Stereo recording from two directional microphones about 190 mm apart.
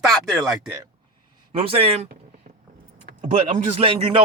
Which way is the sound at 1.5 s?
30° right (ahead or behind).